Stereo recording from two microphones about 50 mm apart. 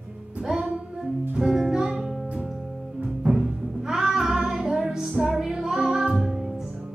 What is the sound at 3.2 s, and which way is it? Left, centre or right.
Music, centre.